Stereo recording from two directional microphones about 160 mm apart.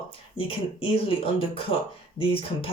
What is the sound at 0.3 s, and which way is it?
Speech, 35° left (ahead or behind).